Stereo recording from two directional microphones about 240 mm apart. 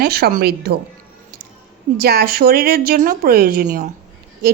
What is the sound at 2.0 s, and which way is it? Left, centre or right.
Speech, right.